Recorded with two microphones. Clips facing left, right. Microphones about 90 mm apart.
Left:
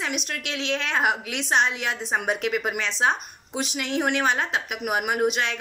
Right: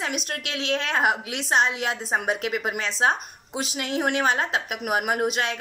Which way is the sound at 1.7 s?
20° right (ahead or behind).